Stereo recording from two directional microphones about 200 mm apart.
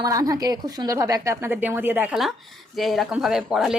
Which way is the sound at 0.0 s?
15° right (ahead or behind).